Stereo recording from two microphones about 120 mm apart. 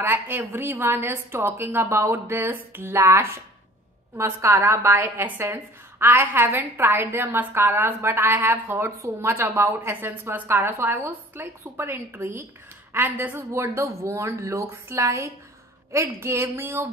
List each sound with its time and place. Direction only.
0.0 s a woman's voice: 15° right (ahead or behind)